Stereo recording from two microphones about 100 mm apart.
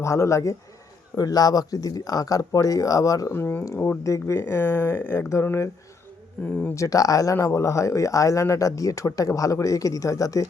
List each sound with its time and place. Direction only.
0.0 s speech: 30° left (ahead or behind)
3.3 s speech: 25° left (ahead or behind)
6.4 s speech: 15° left (ahead or behind)
6.7 s speech: 35° left (ahead or behind)